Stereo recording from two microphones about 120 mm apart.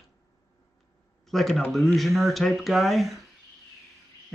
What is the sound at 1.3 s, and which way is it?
A man's voice, centre (ahead or behind).